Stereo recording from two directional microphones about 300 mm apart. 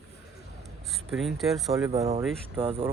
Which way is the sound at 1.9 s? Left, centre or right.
Centre.